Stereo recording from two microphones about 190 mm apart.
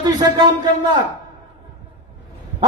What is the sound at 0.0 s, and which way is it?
Speech, 20° right (ahead or behind).